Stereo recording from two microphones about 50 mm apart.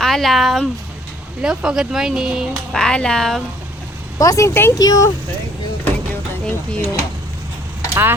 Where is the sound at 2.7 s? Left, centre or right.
Centre.